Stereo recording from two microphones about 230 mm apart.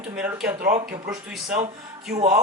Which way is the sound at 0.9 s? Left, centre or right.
Centre.